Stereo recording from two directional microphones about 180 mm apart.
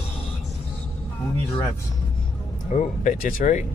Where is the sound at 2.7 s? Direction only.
45° left (ahead or behind).